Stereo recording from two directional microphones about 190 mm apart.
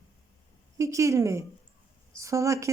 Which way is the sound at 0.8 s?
15° right (ahead or behind).